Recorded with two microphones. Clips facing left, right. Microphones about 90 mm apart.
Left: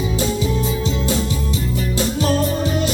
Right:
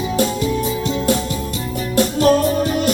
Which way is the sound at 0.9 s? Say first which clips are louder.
Right 3 dB; 55° right (ahead or behind).